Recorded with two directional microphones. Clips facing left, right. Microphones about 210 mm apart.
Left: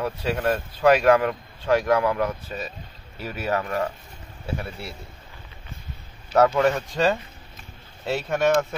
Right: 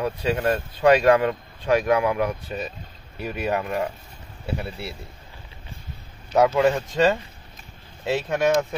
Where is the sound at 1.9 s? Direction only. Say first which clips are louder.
Even; 10° right (ahead or behind).